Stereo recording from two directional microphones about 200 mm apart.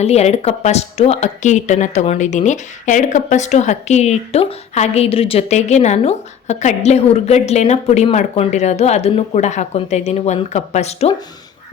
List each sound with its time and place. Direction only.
0.0 s a woman's voice: 30° left (ahead or behind)